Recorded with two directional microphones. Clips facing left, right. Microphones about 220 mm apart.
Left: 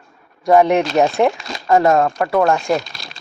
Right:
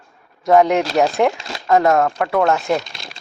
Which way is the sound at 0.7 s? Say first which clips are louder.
Left 1 dB; 20° left (ahead or behind).